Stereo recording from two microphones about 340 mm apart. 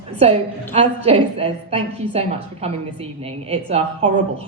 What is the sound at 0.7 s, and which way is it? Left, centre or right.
A woman's voice, centre.